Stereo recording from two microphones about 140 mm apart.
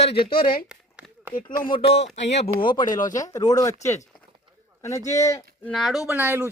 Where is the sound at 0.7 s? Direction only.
10° right (ahead or behind).